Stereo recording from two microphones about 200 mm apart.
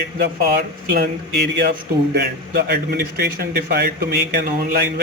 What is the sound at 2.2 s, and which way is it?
A man's voice, 50° right (ahead or behind).